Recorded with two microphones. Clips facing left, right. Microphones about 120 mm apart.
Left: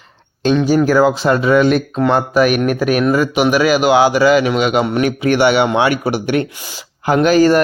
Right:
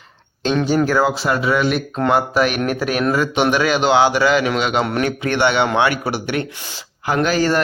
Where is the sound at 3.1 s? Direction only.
10° left (ahead or behind).